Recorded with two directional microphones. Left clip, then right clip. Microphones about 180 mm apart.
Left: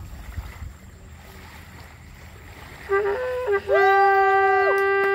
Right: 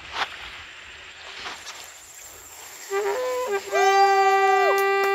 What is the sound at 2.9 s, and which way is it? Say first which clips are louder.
Music: left 2 dB; 40° left (ahead or behind).